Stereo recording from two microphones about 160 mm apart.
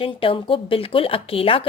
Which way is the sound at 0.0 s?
35° left (ahead or behind).